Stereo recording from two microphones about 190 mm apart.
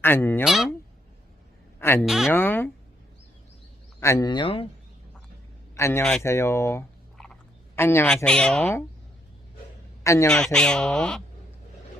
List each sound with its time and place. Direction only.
0.0 s speech: 10° left (ahead or behind)
0.4 s a woman's voice: centre (ahead or behind)
1.8 s speech: 10° left (ahead or behind)
2.0 s a woman's voice: centre (ahead or behind)
2.3 s speech: 10° left (ahead or behind)
4.0 s speech: 20° left (ahead or behind)
5.7 s a man's voice: 15° left (ahead or behind)
10.0 s a man's voice: 15° left (ahead or behind)
10.2 s a woman's voice: 5° left (ahead or behind)